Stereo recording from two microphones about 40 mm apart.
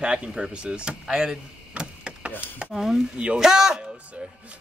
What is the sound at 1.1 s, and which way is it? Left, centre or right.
Door, centre.